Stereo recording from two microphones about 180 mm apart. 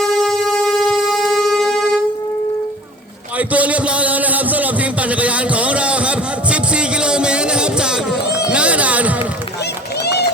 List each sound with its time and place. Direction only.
0.0 s shofar: 5° left (ahead or behind)
3.3 s a sound: 10° right (ahead or behind)
8.4 s run: 5° right (ahead or behind)
10.0 s run: 65° left (ahead or behind)